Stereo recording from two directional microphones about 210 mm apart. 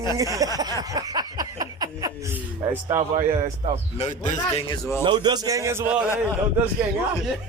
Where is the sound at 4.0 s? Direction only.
35° left (ahead or behind).